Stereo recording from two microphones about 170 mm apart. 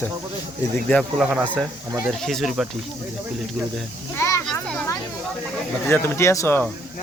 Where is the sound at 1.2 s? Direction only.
5° right (ahead or behind).